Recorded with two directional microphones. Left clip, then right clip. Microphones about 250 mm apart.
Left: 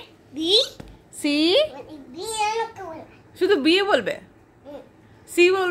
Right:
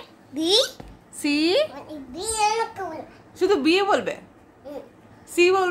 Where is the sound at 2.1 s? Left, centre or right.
Centre.